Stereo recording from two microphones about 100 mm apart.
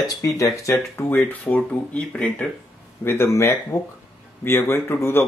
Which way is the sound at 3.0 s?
25° left (ahead or behind).